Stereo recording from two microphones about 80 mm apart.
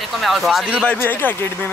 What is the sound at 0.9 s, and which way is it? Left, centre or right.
Speech, left.